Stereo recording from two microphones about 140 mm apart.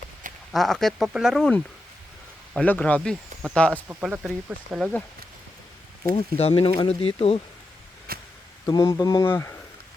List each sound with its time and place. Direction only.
0.5 s speech: centre (ahead or behind)
4.0 s speech: 5° right (ahead or behind)
6.1 s speech: 45° left (ahead or behind)
8.1 s a sound: 90° right
8.6 s speech: 25° left (ahead or behind)